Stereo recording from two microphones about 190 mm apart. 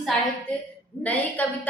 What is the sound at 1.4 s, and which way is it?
Speech, 10° left (ahead or behind).